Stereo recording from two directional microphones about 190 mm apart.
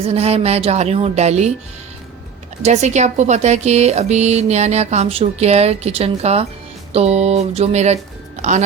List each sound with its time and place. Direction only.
0.0 s speech: 30° right (ahead or behind)
2.6 s speech: 35° right (ahead or behind)